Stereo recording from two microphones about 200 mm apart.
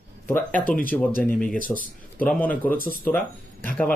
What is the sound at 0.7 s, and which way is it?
Speech, 10° left (ahead or behind).